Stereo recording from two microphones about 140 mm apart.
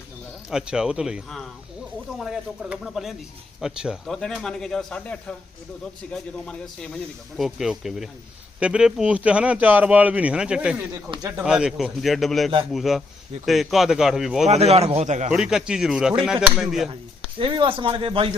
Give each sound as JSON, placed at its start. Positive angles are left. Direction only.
{"t": 0.5, "sound": "speech", "side_deg": -5}
{"t": 14.4, "sound": "a man's voice", "side_deg": -50}
{"t": 15.3, "sound": "speech", "side_deg": -5}
{"t": 17.3, "sound": "speech", "side_deg": -35}